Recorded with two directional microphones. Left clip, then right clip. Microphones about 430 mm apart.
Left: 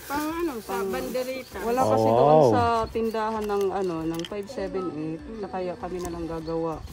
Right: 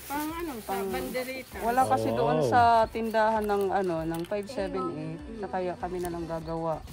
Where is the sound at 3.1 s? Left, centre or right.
Right.